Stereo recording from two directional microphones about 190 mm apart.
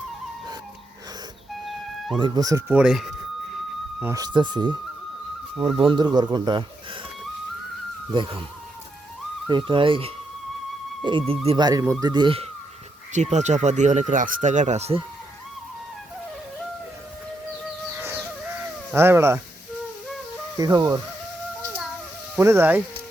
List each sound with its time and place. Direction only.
2.1 s speech: 25° right (ahead or behind)
2.7 s speech: 5° right (ahead or behind)
4.0 s speech: 15° right (ahead or behind)
8.1 s speech: 25° right (ahead or behind)
9.5 s speech: 25° right (ahead or behind)
13.3 s speech: 40° right (ahead or behind)
18.9 s speech: 10° right (ahead or behind)
20.6 s speech: 20° right (ahead or behind)
22.4 s speech: 10° right (ahead or behind)